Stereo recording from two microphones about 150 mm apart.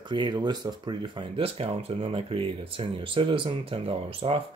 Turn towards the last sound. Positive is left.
turn(degrees=-40)  # may be behind; listen again after turning